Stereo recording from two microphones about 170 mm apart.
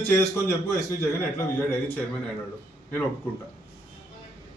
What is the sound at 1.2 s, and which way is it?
Speech, 15° left (ahead or behind).